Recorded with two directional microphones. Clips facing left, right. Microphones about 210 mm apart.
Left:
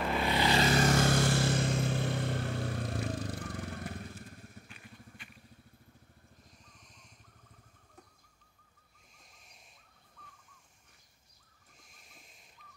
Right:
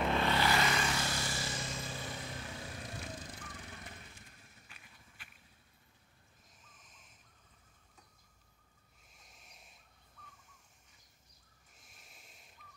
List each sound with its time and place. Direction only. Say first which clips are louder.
0.0 s vehicle: even; 5° left (ahead or behind)
0.3 s vehicle: left 2 dB; 15° left (ahead or behind)
0.6 s vehicle: left 7 dB; 40° left (ahead or behind); by 4.6 s 55° left (ahead or behind)
5.2 s motorcycle: left 7 dB; 5° right (ahead or behind)
6.8 s vehicle: left 4 dB; centre (ahead or behind)
9.2 s a sound: even; centre (ahead or behind)
11.8 s a sound: left 2 dB; centre (ahead or behind)